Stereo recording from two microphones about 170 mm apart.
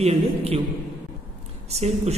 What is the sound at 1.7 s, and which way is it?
Speech, 40° right (ahead or behind).